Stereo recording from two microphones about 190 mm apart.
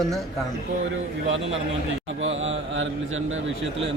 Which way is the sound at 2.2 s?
90° right.